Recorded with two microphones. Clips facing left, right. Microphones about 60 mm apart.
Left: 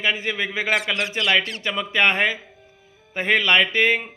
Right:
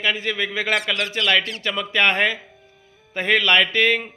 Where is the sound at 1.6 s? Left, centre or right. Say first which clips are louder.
Even; centre.